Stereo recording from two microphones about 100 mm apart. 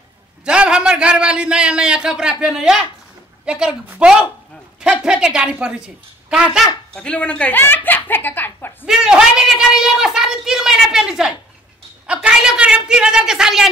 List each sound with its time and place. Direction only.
0.5 s a man's voice: 10° right (ahead or behind)
7.0 s speech: 10° left (ahead or behind)
8.8 s a woman's voice: 5° right (ahead or behind)
12.1 s a sound: 10° right (ahead or behind)